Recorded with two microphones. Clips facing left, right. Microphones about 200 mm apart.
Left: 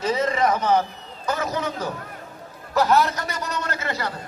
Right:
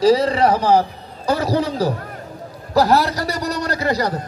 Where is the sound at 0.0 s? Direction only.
35° right (ahead or behind).